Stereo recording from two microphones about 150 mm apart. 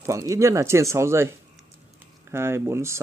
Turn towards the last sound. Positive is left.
turn(degrees=-20)  # may be behind; listen again after turning